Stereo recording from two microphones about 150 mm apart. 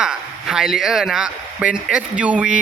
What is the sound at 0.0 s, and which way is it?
Speech, 5° right (ahead or behind).